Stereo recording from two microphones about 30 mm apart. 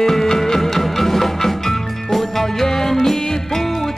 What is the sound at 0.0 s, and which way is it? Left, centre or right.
Music, centre.